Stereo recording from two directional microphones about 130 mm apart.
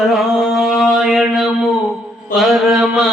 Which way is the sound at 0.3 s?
Centre (ahead or behind).